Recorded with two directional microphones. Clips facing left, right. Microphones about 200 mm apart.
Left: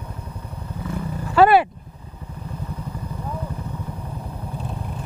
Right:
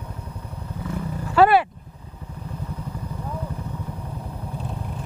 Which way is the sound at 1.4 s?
10° left (ahead or behind).